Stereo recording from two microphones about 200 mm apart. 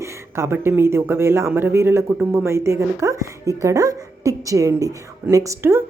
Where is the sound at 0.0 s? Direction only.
15° right (ahead or behind).